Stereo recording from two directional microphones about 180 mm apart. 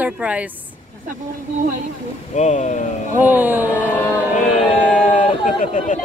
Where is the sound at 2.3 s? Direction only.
40° left (ahead or behind).